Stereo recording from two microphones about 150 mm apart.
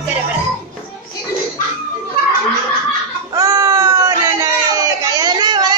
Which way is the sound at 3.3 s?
25° right (ahead or behind).